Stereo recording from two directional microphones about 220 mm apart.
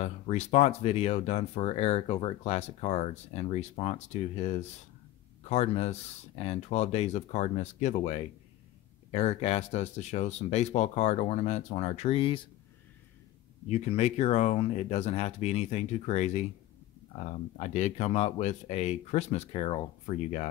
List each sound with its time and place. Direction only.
0.0 s speech: 30° left (ahead or behind)
13.7 s speech: 30° left (ahead or behind)